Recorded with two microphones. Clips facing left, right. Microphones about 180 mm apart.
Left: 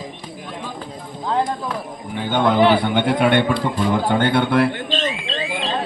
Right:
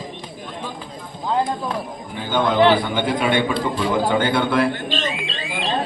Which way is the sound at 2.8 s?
60° left (ahead or behind).